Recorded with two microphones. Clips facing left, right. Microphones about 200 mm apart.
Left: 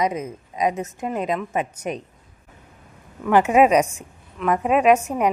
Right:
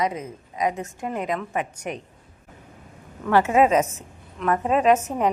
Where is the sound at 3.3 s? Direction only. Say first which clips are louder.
Left 2 dB; 15° left (ahead or behind).